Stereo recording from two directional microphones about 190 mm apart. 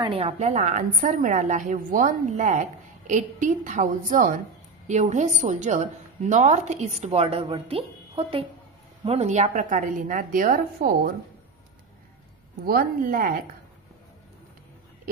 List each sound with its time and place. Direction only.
0.0 s a woman's voice: 30° right (ahead or behind); by 11.1 s 45° right (ahead or behind)
12.6 s a woman's voice: 50° right (ahead or behind)